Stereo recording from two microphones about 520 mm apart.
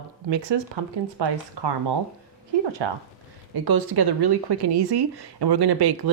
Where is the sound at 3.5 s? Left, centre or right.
Right.